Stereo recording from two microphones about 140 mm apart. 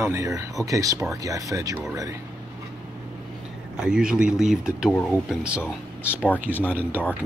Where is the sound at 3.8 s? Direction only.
5° right (ahead or behind).